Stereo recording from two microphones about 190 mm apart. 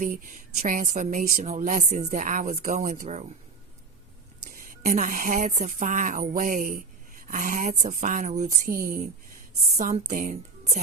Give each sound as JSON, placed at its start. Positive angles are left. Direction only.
{"t": 0.0, "sound": "speech", "side_deg": -45}
{"t": 4.4, "sound": "a woman's voice", "side_deg": -45}